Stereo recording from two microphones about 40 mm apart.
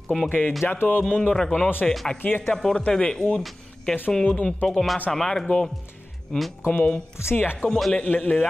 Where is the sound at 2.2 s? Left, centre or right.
Left.